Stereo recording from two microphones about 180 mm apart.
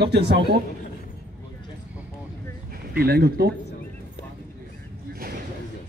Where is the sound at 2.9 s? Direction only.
60° right (ahead or behind).